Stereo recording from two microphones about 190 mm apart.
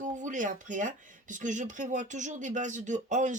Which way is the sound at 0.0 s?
40° right (ahead or behind).